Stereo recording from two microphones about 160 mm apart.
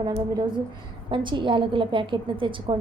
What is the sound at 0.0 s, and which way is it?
A woman's voice, 25° right (ahead or behind).